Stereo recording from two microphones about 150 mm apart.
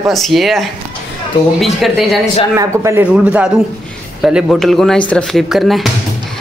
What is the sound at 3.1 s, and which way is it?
Speech, 5° right (ahead or behind).